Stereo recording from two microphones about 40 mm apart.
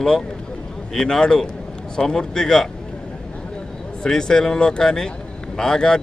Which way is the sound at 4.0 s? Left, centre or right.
Centre.